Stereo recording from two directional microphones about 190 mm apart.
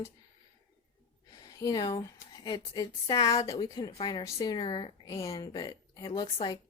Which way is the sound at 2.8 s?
20° left (ahead or behind).